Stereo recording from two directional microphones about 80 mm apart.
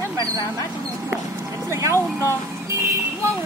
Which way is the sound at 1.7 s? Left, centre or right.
Right.